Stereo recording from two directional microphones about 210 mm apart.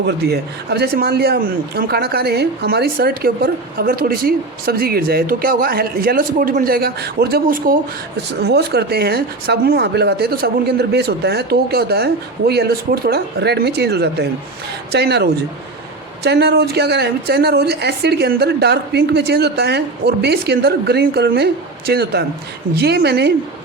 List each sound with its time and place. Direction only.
0.0 s speech: 50° right (ahead or behind)